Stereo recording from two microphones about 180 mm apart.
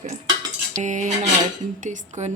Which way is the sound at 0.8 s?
45° right (ahead or behind).